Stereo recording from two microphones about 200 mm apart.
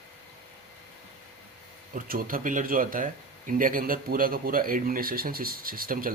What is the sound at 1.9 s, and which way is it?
Speech, 45° right (ahead or behind).